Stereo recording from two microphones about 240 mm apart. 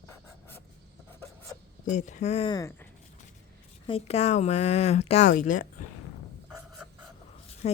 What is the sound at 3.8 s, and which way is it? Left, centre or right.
Speech, left.